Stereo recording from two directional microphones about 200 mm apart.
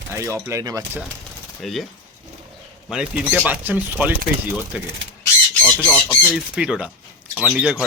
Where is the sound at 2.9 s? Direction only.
5° right (ahead or behind).